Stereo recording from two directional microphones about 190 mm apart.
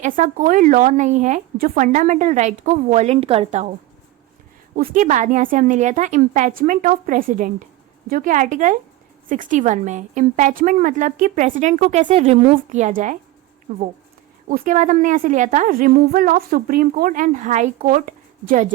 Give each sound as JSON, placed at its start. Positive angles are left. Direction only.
{"t": 0.0, "sound": "a woman's voice", "side_deg": -45}
{"t": 4.8, "sound": "a woman's voice", "side_deg": -45}